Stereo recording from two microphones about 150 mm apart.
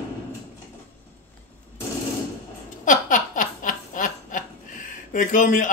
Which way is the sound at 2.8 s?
60° left (ahead or behind).